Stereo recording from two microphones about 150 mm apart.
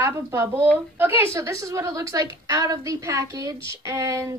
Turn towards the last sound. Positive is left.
turn(degrees=-20)  # may be behind; listen again after turning